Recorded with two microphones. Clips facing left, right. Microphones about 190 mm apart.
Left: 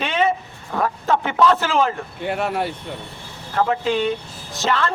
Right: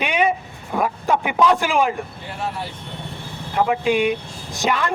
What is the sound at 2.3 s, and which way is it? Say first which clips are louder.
Speech: left 8 dB; 65° left (ahead or behind).